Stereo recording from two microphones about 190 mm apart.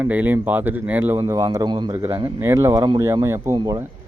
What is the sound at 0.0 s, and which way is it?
Speech, 10° right (ahead or behind).